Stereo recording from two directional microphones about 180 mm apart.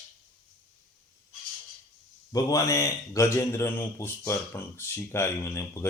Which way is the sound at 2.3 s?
20° left (ahead or behind).